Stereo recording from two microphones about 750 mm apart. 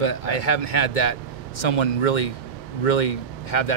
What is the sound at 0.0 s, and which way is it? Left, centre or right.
Speech, left.